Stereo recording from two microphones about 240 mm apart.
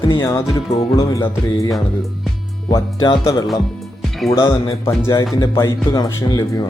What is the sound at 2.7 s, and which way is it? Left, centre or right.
Speech, centre.